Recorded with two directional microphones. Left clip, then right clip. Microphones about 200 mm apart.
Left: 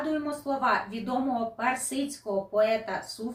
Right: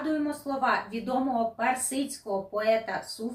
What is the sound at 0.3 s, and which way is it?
A woman's voice, 15° left (ahead or behind).